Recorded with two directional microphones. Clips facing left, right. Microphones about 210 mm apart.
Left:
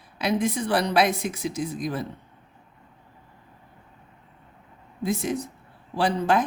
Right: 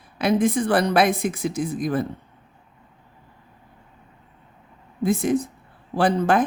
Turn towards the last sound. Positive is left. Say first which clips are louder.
# right 3 dB
turn(degrees=-50)  # may be behind; listen again after turning